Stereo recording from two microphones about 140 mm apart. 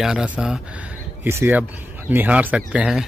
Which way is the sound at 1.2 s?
15° right (ahead or behind).